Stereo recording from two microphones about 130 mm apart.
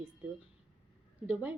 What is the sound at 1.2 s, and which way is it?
Speech, 10° right (ahead or behind).